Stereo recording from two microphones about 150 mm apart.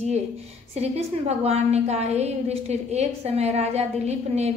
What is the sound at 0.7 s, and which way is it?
A woman's voice, 45° right (ahead or behind).